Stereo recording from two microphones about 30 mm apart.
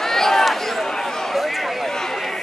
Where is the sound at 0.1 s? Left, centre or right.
Centre.